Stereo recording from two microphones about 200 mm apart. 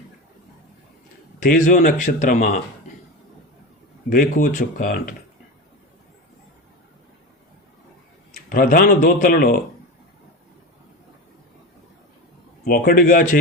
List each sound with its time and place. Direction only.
1.5 s speech: 40° left (ahead or behind)
4.1 s speech: 40° left (ahead or behind)
8.4 s speech: 45° left (ahead or behind)
12.6 s speech: 45° left (ahead or behind)